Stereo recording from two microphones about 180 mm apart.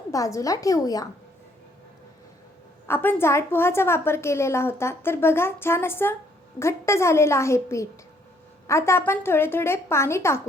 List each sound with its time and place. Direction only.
0.1 s a woman's voice: 20° left (ahead or behind)
2.8 s a woman's voice: 10° left (ahead or behind)